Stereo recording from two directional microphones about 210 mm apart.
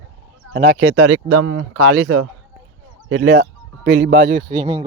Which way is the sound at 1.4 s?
85° right.